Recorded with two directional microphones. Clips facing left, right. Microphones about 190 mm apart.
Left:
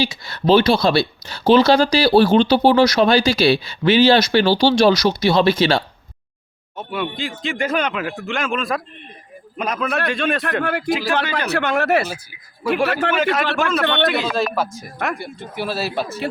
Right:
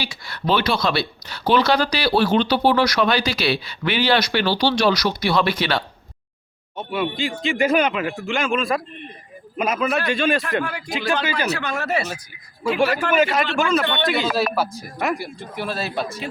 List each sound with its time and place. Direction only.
0.0 s speech: 25° left (ahead or behind)
6.7 s a man's voice: centre (ahead or behind)
10.6 s speech: 60° left (ahead or behind)
10.8 s a man's voice: centre (ahead or behind)
11.5 s speech: 60° left (ahead or behind)
13.1 s a man's voice: 10° right (ahead or behind)
13.6 s a man's voice: centre (ahead or behind)
13.8 s speech: 60° left (ahead or behind)
14.1 s a man's voice: centre (ahead or behind)